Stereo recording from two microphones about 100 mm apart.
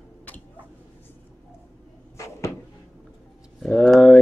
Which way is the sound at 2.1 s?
30° left (ahead or behind).